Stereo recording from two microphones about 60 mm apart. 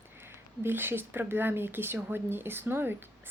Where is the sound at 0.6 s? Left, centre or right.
Right.